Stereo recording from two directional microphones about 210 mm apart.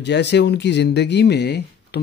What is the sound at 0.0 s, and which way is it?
Speech, 55° left (ahead or behind).